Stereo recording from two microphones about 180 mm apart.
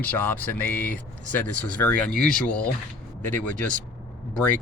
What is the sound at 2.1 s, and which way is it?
Speech, 55° right (ahead or behind).